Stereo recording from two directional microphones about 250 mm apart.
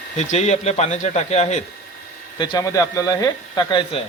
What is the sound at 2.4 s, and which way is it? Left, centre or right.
Speech, centre.